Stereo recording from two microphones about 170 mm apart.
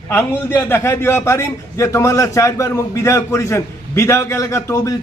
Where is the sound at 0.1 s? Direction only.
10° left (ahead or behind).